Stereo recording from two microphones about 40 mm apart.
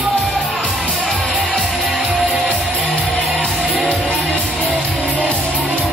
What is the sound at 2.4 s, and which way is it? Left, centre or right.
Music, centre.